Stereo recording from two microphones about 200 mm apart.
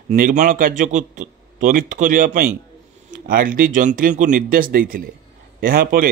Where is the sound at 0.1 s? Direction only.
40° right (ahead or behind).